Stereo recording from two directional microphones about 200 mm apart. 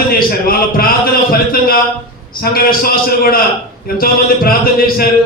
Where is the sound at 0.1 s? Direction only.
45° left (ahead or behind).